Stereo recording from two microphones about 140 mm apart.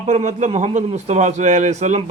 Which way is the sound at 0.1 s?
55° right (ahead or behind).